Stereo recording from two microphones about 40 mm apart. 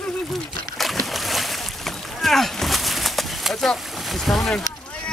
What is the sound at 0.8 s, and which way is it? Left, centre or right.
Boat, centre.